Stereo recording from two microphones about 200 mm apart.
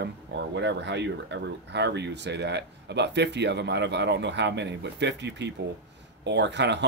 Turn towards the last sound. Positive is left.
turn(degrees=-60)  # may be behind; listen again after turning